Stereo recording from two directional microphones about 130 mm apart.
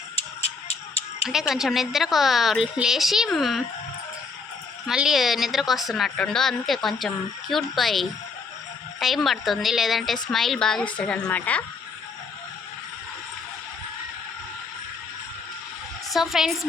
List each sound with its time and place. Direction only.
0.4 s a sound: 55° left (ahead or behind)
1.3 s a woman's voice: 5° right (ahead or behind)
4.9 s a woman's voice: 5° right (ahead or behind)
16.1 s a woman's voice: centre (ahead or behind)